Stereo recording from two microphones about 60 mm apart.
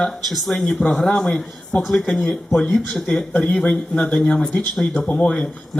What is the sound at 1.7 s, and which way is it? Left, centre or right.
Speech, left.